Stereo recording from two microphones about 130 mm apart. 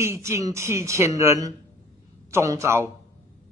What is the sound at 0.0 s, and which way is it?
Speech, 20° right (ahead or behind).